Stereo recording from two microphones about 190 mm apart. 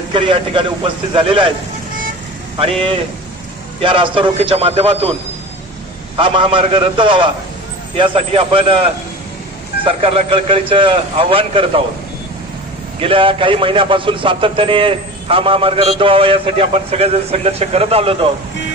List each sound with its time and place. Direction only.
0.1 s a man's voice: 30° right (ahead or behind)
3.8 s a man's voice: 25° right (ahead or behind)
6.1 s a man's voice: 25° right (ahead or behind)
9.8 s a man's voice: 30° right (ahead or behind)
13.0 s a man's voice: 25° right (ahead or behind)